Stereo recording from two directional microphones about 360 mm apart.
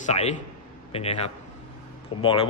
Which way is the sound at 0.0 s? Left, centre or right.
Centre.